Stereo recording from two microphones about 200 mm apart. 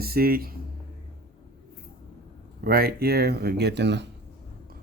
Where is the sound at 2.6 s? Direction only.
50° right (ahead or behind).